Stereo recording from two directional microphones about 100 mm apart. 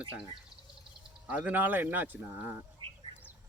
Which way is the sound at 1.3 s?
15° right (ahead or behind).